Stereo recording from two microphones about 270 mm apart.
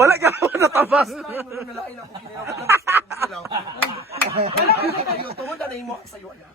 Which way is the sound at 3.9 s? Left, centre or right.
Right.